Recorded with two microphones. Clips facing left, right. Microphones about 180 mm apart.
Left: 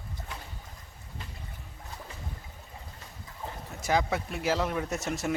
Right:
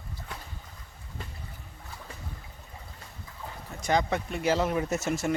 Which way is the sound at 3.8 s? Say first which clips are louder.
Right 1 dB; 5° left (ahead or behind).